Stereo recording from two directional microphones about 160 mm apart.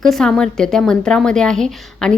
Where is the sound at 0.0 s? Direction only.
5° left (ahead or behind).